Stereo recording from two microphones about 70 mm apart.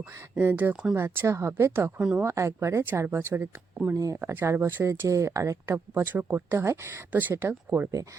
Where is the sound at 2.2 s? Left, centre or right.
Right.